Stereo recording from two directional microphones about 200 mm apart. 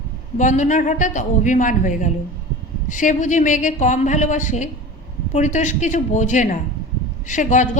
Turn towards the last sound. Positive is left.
turn(degrees=40)  # may be behind; listen again after turning